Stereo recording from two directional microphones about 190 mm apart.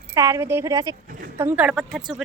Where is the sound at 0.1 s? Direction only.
15° right (ahead or behind).